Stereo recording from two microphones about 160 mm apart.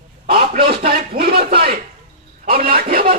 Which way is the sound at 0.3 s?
70° right (ahead or behind).